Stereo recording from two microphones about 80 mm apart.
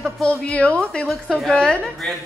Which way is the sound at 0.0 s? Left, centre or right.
Centre.